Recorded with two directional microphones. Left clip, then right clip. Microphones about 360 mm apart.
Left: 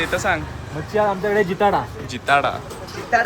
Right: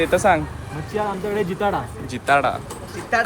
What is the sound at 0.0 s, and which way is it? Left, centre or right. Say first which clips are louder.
Speech: right 4 dB; centre.